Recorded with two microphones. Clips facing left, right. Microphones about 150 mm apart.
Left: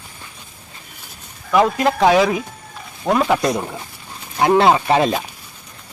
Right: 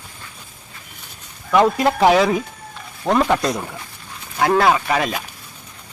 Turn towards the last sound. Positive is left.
turn(degrees=30)  # may be behind; listen again after turning